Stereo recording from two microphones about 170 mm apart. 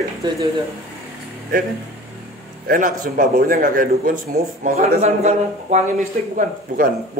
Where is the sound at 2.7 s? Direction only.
55° right (ahead or behind).